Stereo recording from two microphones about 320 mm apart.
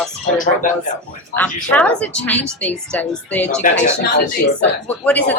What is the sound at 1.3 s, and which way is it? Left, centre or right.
A man's voice, centre.